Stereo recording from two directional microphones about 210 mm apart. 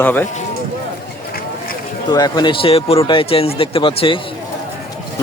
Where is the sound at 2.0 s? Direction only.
20° left (ahead or behind).